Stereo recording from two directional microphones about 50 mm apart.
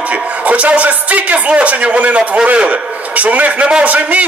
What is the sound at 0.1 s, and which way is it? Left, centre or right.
A man's voice, right.